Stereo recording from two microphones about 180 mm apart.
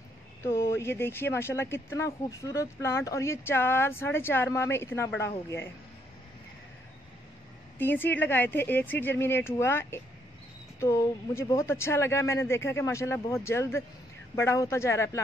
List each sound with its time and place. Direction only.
0.4 s speech: 15° left (ahead or behind)
7.8 s speech: 10° left (ahead or behind)